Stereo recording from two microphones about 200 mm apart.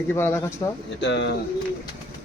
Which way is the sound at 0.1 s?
10° left (ahead or behind).